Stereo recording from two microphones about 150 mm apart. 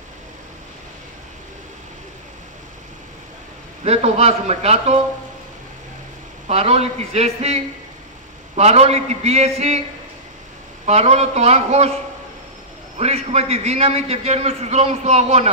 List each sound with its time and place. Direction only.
3.8 s a man's voice: 45° right (ahead or behind)
6.4 s a man's voice: 45° right (ahead or behind)
10.9 s a man's voice: 45° right (ahead or behind)
12.9 s a man's voice: 45° right (ahead or behind)